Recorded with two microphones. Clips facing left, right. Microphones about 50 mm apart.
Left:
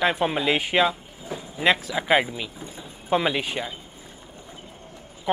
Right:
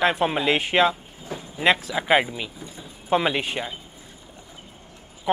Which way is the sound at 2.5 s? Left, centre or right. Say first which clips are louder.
Left 1 dB; left.